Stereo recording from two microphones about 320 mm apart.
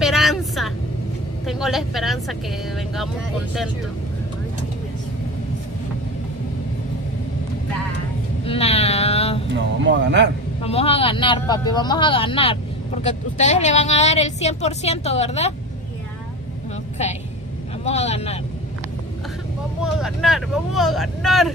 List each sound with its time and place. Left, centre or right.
0.0 s vehicle: centre
1.5 s speech: centre
8.5 s a sound: centre
9.5 s speech: right
10.6 s a woman's voice: centre
17.8 s a woman's voice: centre
19.8 s speech: centre